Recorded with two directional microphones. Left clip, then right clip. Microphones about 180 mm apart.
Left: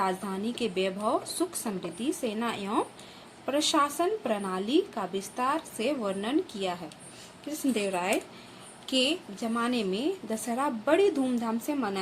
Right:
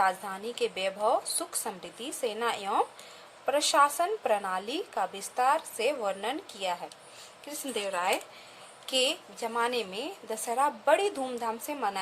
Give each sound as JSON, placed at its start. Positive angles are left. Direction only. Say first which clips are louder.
{"t": 0.0, "sound": "a woman's voice", "louder": "right 2 dB", "side_deg": -25}
{"t": 8.9, "sound": "a woman's voice", "louder": "left 1 dB", "side_deg": -35}